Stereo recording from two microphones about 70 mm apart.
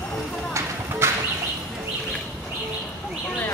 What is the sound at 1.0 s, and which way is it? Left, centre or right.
Bird, right.